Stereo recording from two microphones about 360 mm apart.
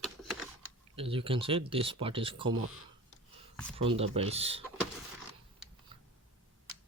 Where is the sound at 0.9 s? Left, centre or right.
Centre.